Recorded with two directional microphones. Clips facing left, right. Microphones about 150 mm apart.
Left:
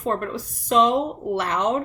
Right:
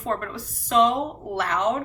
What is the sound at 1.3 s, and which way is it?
Speech, 20° left (ahead or behind).